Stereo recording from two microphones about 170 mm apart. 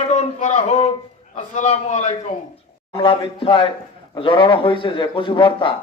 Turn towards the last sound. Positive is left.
turn(degrees=30)  # may be behind; listen again after turning